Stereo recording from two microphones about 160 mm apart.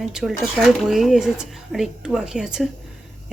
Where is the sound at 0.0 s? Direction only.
5° right (ahead or behind).